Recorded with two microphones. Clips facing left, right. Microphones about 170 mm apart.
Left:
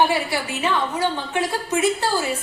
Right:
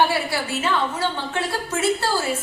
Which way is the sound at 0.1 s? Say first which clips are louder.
Left 1 dB; 15° left (ahead or behind).